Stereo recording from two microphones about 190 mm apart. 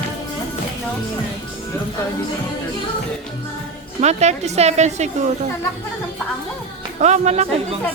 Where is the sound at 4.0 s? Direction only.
35° right (ahead or behind).